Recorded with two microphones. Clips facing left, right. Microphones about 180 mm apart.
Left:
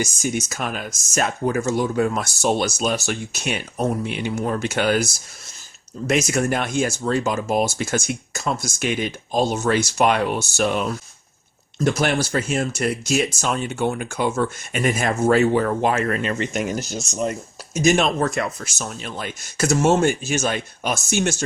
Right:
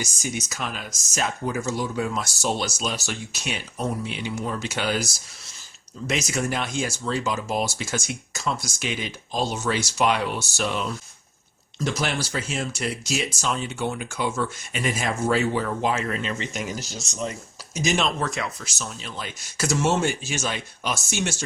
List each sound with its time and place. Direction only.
0.0 s speech: 50° left (ahead or behind)